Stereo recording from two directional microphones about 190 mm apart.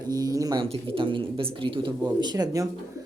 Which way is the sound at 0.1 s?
20° right (ahead or behind).